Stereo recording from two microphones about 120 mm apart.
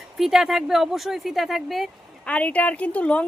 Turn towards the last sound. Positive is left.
turn(degrees=10)  # may be behind; listen again after turning